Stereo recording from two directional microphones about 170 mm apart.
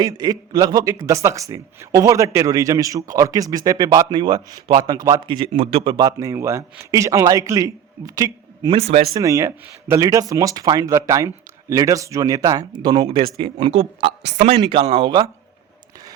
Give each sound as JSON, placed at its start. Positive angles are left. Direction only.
{"t": 0.0, "sound": "a man's voice", "side_deg": -25}
{"t": 8.8, "sound": "speech", "side_deg": -35}
{"t": 9.1, "sound": "a man's voice", "side_deg": -20}